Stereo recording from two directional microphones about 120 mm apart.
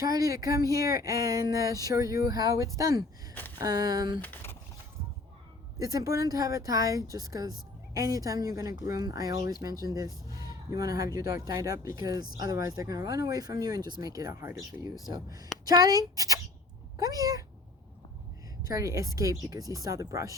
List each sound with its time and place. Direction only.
0.0 s speech: 30° right (ahead or behind)
4.2 s a sound: 15° left (ahead or behind)
5.8 s speech: 30° right (ahead or behind)
18.7 s speech: 25° right (ahead or behind)